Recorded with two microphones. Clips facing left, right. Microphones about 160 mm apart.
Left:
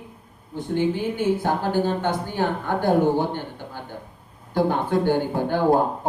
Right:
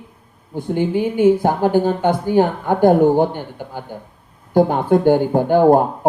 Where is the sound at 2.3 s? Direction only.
50° right (ahead or behind).